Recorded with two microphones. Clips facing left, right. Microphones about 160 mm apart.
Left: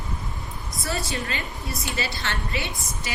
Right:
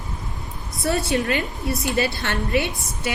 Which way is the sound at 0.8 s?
65° right (ahead or behind).